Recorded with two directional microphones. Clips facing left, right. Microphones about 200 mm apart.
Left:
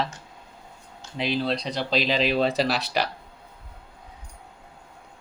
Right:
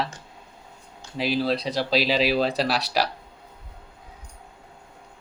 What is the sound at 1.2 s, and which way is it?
Speech, 5° right (ahead or behind).